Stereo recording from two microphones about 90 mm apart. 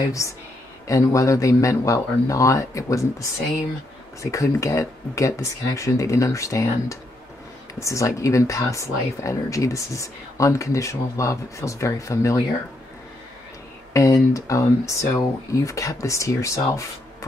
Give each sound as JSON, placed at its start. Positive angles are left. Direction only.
{"t": 0.2, "sound": "speech", "side_deg": 35}
{"t": 13.9, "sound": "speech", "side_deg": 35}